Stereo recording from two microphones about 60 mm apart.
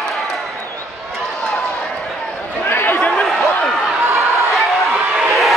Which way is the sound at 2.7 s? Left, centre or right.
Left.